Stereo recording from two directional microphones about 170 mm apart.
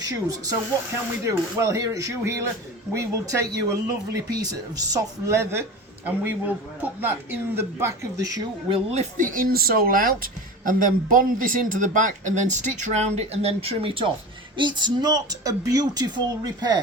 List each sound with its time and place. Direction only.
0.0 s a woman's voice: 20° right (ahead or behind)
8.7 s speech: 40° right (ahead or behind); by 16.8 s 25° right (ahead or behind)